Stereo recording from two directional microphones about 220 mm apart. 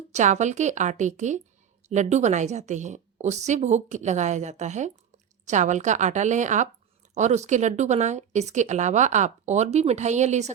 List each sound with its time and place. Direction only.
0.1 s speech: 30° right (ahead or behind)